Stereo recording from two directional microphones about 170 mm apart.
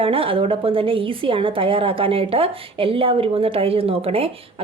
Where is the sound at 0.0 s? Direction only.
35° right (ahead or behind).